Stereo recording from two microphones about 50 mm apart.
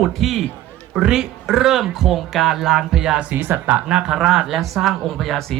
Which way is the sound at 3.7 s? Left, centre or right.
Right.